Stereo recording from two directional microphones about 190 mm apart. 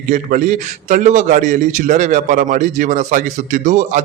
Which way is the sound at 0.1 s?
40° right (ahead or behind).